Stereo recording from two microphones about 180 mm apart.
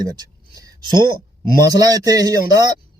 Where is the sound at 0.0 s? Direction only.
20° right (ahead or behind).